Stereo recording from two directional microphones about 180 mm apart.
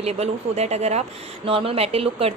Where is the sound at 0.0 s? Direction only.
35° right (ahead or behind).